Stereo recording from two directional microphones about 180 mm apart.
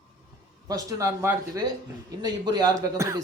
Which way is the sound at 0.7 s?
20° right (ahead or behind).